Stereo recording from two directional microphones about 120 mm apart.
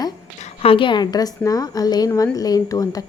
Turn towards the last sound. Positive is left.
turn(degrees=30)  # may be behind; listen again after turning